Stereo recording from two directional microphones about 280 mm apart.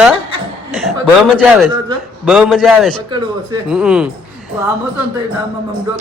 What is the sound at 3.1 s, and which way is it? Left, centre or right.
Speech, centre.